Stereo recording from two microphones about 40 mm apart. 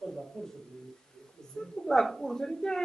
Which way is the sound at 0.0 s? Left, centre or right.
Centre.